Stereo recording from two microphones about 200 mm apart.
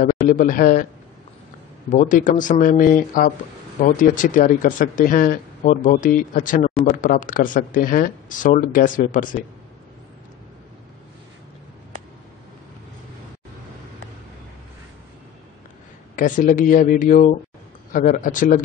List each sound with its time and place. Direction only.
0.0 s a man's voice: 40° left (ahead or behind)
1.9 s speech: 40° left (ahead or behind)
16.2 s speech: 40° left (ahead or behind)